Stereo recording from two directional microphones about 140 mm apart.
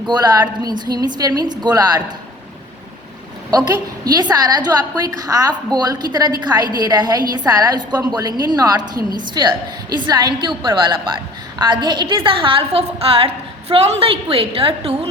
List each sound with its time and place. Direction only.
0.1 s a woman's voice: 30° right (ahead or behind)
3.5 s a woman's voice: 30° right (ahead or behind); by 14.9 s 45° right (ahead or behind)